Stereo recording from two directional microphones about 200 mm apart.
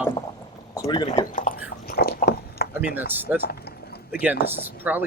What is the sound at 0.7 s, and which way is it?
Speech, 20° left (ahead or behind).